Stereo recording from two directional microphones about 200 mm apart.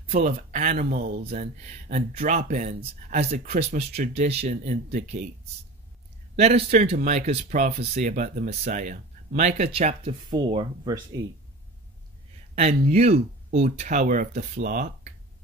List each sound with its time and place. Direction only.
0.1 s speech: 35° right (ahead or behind)
6.3 s speech: 35° right (ahead or behind)
12.5 s speech: 35° right (ahead or behind)